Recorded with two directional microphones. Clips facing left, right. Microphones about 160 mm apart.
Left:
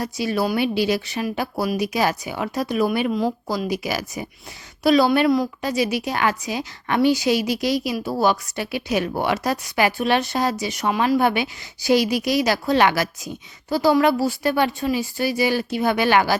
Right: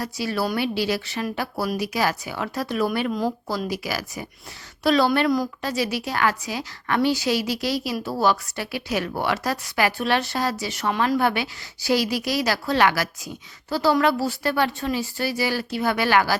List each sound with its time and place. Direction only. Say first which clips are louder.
0.0 s speech: left 3 dB; 20° left (ahead or behind)